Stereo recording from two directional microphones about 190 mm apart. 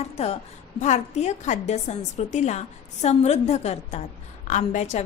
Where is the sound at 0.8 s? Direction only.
35° left (ahead or behind).